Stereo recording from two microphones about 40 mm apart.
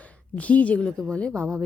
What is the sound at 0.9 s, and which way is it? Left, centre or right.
Speech, left.